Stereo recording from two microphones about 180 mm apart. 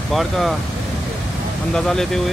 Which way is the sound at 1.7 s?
Centre (ahead or behind).